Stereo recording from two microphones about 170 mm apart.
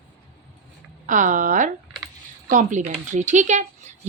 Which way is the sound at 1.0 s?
50° right (ahead or behind).